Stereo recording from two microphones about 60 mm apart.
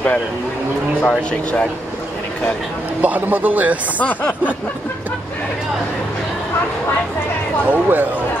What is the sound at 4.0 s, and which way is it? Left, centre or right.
Speech, left.